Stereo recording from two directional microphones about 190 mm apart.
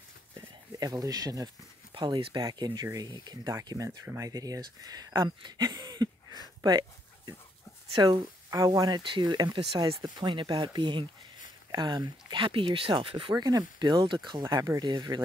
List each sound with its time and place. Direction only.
0.7 s speech: 20° right (ahead or behind)
6.6 s a sound: 20° right (ahead or behind)
7.9 s speech: 25° right (ahead or behind)